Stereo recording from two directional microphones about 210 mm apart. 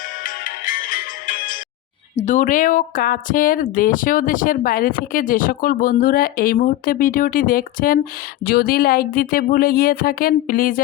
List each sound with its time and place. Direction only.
0.2 s music: 40° left (ahead or behind)
2.1 s a woman's voice: 35° left (ahead or behind)